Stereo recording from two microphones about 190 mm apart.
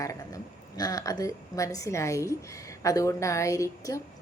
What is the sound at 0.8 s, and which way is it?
A woman's voice, 20° left (ahead or behind).